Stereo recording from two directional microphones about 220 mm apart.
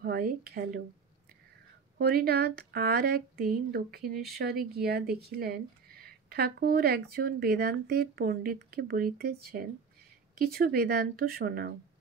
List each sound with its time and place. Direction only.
0.0 s speech: 45° right (ahead or behind)
2.0 s speech: 45° right (ahead or behind)